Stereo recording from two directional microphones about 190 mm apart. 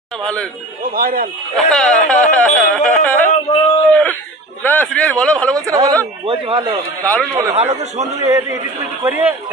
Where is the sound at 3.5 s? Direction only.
25° left (ahead or behind).